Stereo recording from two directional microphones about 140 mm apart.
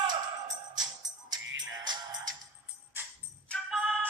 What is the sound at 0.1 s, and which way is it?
Music, 30° right (ahead or behind).